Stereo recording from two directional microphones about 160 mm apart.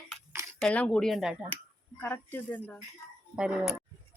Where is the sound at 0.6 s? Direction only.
5° left (ahead or behind).